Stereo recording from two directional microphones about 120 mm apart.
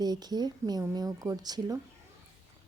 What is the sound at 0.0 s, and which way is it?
Speech, 35° right (ahead or behind).